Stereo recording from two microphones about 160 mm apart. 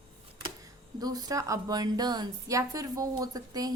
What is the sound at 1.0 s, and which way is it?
A woman's voice, 25° right (ahead or behind).